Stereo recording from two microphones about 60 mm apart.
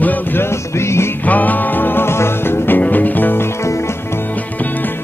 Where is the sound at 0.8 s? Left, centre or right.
Left.